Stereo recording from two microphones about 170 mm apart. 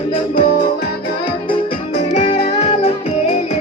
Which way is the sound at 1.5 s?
35° left (ahead or behind).